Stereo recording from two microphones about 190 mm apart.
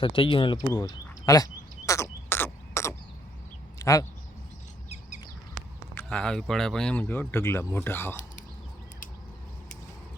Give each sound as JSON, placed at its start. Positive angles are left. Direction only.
{"t": 0.0, "sound": "speech", "side_deg": 25}
{"t": 1.9, "sound": "a sound", "side_deg": 15}
{"t": 5.9, "sound": "speech", "side_deg": 10}